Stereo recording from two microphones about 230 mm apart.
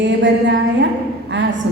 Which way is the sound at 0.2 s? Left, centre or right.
Right.